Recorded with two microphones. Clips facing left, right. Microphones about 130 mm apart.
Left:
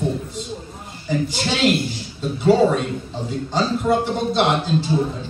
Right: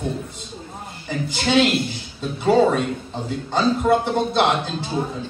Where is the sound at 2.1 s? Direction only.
50° right (ahead or behind).